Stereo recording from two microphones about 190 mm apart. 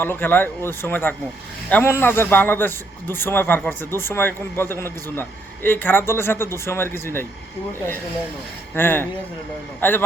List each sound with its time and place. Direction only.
0.0 s a man's voice: 10° left (ahead or behind)
8.7 s a man's voice: 10° left (ahead or behind)